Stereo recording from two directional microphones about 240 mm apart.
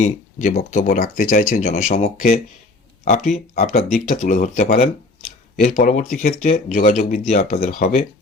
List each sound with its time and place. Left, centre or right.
0.0 s speech: left